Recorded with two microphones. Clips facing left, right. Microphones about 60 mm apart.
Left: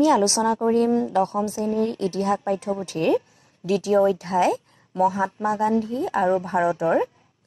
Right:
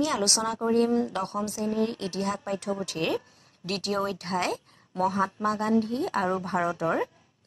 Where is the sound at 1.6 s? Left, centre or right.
Left.